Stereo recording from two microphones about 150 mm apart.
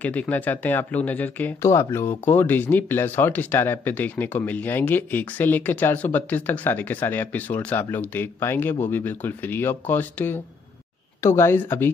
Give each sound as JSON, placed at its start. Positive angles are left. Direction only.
{"t": 0.0, "sound": "speech", "side_deg": 10}